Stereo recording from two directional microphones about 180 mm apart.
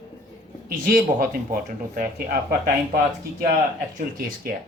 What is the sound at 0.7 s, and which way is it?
Speech, 50° right (ahead or behind).